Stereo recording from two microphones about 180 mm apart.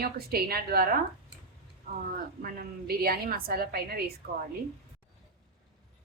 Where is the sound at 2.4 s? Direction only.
55° right (ahead or behind).